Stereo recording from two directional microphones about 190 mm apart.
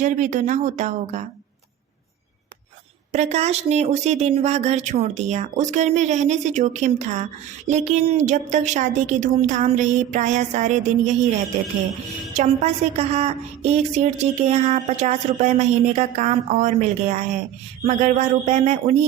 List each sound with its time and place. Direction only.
0.0 s a woman's voice: 40° right (ahead or behind)
3.1 s a woman's voice: 35° right (ahead or behind)